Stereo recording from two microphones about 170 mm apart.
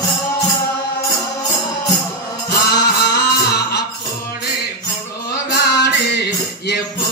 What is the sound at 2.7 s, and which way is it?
Music, 75° left (ahead or behind).